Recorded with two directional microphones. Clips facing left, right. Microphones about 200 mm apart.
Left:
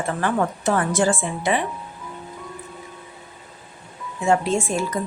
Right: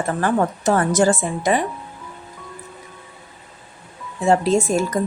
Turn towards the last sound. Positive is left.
turn(degrees=-40)  # may be behind; listen again after turning